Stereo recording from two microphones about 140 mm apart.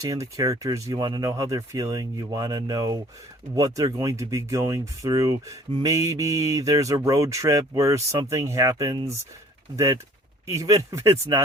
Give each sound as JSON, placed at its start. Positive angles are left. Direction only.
{"t": 0.0, "sound": "speech", "side_deg": -20}